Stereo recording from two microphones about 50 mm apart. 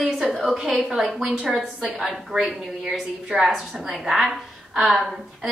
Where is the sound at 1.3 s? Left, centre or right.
Right.